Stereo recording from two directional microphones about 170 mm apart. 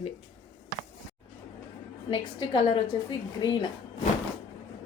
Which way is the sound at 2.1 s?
30° left (ahead or behind).